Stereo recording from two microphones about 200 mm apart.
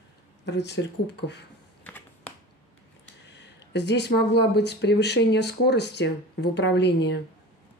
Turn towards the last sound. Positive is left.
turn(degrees=60)  # may be behind; listen again after turning